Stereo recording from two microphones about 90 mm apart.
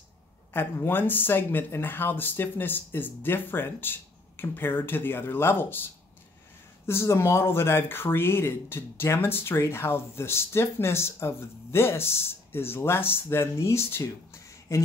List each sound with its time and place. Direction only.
0.5 s speech: 25° left (ahead or behind)
6.9 s speech: 30° left (ahead or behind)